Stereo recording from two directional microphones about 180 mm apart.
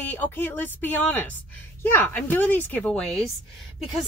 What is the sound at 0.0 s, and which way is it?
Speech, 10° left (ahead or behind).